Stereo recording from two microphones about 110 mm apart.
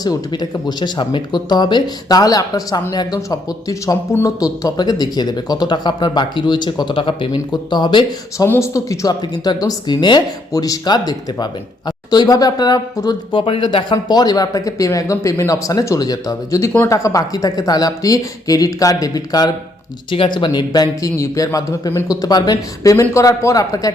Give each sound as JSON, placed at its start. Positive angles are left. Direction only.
{"t": 0.0, "sound": "speech", "side_deg": 35}
{"t": 8.4, "sound": "speech", "side_deg": 25}
{"t": 13.3, "sound": "speech", "side_deg": 50}
{"t": 20.1, "sound": "speech", "side_deg": 50}